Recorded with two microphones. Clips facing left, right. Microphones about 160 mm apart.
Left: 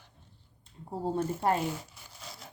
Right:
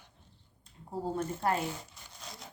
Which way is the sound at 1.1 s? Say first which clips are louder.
Left 3 dB; 25° left (ahead or behind).